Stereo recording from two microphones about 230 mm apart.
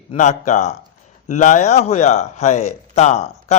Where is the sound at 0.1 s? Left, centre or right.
Left.